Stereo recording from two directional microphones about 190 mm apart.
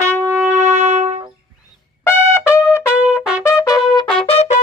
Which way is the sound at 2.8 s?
5° right (ahead or behind).